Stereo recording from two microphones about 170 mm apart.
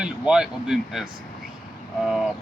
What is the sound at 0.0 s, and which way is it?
Speech, 5° right (ahead or behind).